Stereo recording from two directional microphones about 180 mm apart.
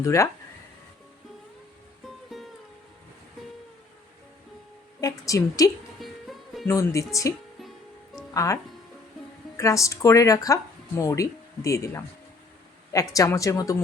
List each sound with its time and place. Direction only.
0.0 s speech: 15° left (ahead or behind)
2.3 s music: centre (ahead or behind)
4.9 s a woman's voice: 20° left (ahead or behind)
6.0 s music: centre (ahead or behind)
6.7 s speech: 15° left (ahead or behind)
9.6 s speech: 15° left (ahead or behind)
13.1 s speech: 20° left (ahead or behind)